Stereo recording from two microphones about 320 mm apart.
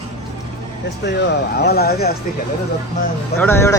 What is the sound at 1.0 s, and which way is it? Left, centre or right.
Speech, left.